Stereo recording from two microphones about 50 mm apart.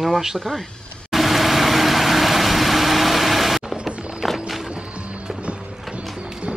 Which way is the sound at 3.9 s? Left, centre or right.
Right.